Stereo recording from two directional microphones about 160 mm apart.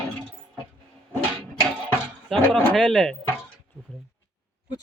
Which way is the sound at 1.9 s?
5° left (ahead or behind).